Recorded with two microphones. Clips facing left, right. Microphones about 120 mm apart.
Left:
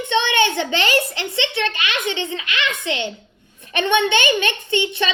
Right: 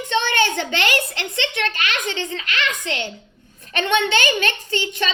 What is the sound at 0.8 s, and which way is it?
Speech, 55° right (ahead or behind).